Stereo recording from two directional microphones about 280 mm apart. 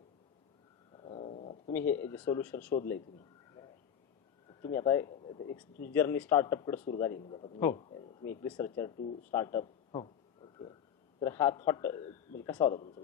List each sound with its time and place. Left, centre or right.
0.9 s cat: centre
1.7 s speech: centre
4.5 s speech: centre
5.9 s speech: centre
7.2 s speech: centre
8.9 s speech: left
9.3 s a man's voice: centre
12.7 s speech: left